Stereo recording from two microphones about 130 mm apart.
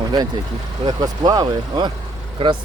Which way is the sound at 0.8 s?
30° right (ahead or behind).